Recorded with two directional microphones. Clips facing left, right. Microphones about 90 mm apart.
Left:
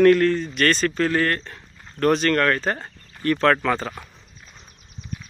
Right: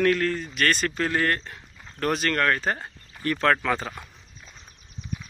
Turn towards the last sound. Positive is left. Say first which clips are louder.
# left 3 dB
turn(degrees=-5)  # may be behind; listen again after turning